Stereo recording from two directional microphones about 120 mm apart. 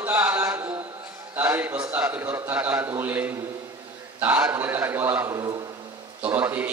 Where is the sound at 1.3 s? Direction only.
15° right (ahead or behind).